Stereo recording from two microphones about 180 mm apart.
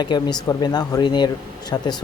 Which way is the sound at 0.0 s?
25° left (ahead or behind).